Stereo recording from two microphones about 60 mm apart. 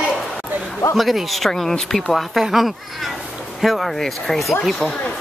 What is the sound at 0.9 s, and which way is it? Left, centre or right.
Speech, centre.